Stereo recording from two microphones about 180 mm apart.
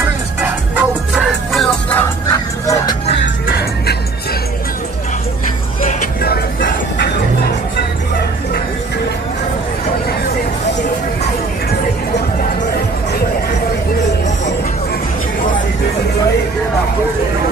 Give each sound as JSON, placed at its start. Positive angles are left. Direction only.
{"t": 0.7, "sound": "music", "side_deg": 0}
{"t": 2.0, "sound": "music", "side_deg": 15}
{"t": 3.4, "sound": "music", "side_deg": 60}
{"t": 6.2, "sound": "music", "side_deg": 55}